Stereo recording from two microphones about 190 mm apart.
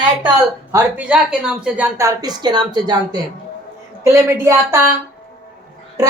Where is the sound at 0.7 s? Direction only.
10° right (ahead or behind).